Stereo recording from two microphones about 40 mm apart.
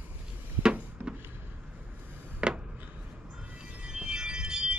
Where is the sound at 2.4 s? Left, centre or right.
Right.